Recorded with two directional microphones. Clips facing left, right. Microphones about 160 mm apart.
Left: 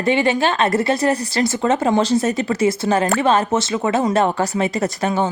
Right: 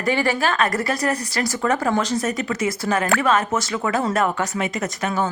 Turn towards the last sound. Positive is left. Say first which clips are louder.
# left 4 dB
turn(degrees=30)  # may be behind; listen again after turning